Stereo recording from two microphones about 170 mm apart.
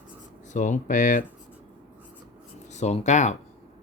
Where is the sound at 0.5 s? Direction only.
45° left (ahead or behind).